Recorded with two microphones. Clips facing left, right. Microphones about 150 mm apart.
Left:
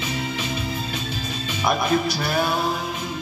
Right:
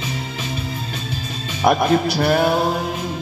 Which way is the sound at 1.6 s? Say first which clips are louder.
Right 5 dB; 60° right (ahead or behind).